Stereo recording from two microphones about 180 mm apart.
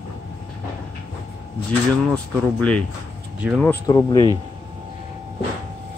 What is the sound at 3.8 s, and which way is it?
Speech, 20° left (ahead or behind).